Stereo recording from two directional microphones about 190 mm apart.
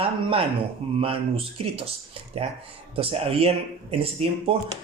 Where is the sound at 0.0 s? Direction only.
30° right (ahead or behind).